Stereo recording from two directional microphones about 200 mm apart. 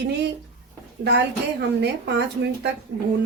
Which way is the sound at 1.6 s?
55° right (ahead or behind).